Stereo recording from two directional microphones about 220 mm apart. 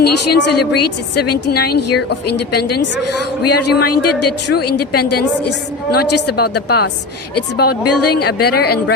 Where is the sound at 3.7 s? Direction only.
45° left (ahead or behind).